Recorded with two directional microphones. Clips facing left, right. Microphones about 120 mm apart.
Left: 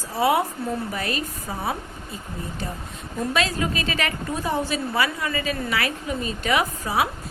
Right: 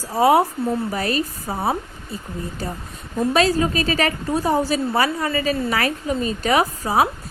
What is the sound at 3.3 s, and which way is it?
A woman's voice, 35° right (ahead or behind).